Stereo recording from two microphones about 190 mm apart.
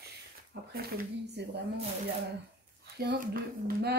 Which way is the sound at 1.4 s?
65° right (ahead or behind).